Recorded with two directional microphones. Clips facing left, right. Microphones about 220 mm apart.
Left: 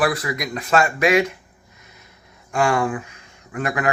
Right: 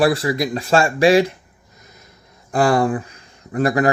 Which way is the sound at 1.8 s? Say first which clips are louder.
Right 4 dB; 40° right (ahead or behind).